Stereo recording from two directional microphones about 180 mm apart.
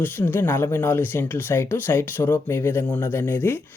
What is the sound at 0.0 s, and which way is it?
Speech, 10° left (ahead or behind).